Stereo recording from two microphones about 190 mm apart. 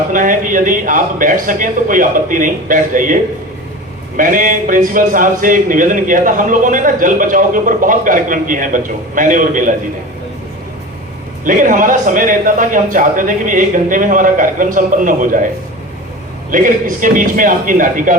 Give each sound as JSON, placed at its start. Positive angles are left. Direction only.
{"t": 0.1, "sound": "a man's voice", "side_deg": -45}
{"t": 4.2, "sound": "a man's voice", "side_deg": -45}
{"t": 11.4, "sound": "a man's voice", "side_deg": -45}
{"t": 16.5, "sound": "a man's voice", "side_deg": -45}